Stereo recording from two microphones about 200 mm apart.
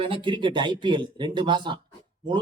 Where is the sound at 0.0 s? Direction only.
25° right (ahead or behind).